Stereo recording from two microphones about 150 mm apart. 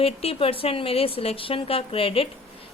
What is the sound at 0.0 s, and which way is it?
A woman's voice, 40° left (ahead or behind).